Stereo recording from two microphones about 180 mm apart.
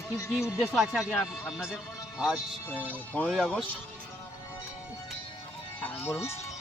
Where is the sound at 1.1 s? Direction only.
15° left (ahead or behind).